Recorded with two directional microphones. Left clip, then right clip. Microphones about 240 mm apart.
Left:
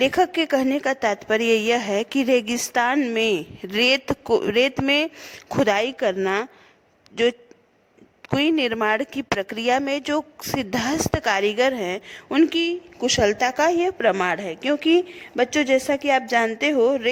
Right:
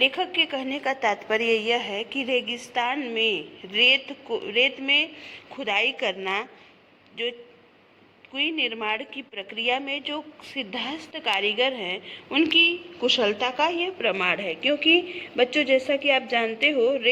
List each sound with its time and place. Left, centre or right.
0.0 s a woman's voice: left
8.4 s a woman's voice: left